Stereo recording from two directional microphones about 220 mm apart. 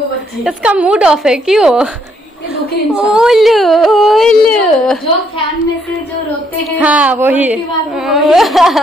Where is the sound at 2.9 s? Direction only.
Centre (ahead or behind).